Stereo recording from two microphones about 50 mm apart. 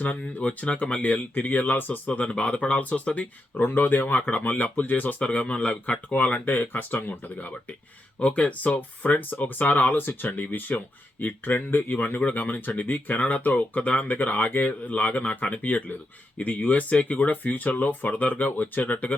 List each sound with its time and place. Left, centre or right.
0.0 s speech: left
3.5 s speech: left
4.0 s speech: left
5.2 s speech: left